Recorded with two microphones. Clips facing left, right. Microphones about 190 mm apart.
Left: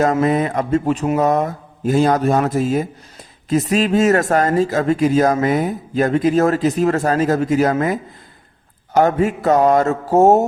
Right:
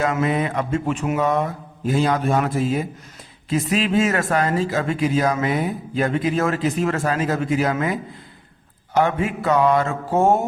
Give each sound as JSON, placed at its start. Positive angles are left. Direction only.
{"t": 0.0, "sound": "a man's voice", "side_deg": 40}